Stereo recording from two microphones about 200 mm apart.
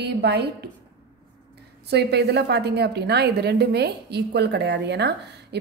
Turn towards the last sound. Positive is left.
turn(degrees=-55)  # may be behind; listen again after turning